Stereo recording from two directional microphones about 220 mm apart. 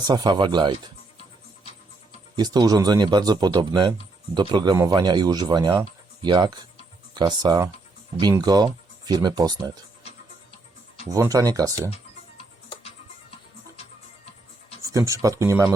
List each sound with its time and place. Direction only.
0.1 s speech: 20° right (ahead or behind)
2.3 s speech: 20° right (ahead or behind)
11.1 s speech: 15° right (ahead or behind)
14.8 s speech: 15° right (ahead or behind)